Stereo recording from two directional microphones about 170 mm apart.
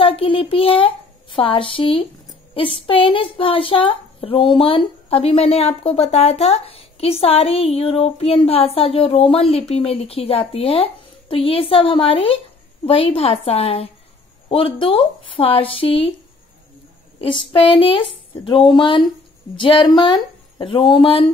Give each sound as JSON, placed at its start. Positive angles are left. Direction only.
{"t": 0.0, "sound": "speech", "side_deg": 35}
{"t": 17.2, "sound": "speech", "side_deg": 30}